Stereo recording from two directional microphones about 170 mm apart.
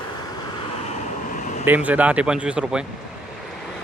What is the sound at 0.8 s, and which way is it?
Vehicle, 40° left (ahead or behind).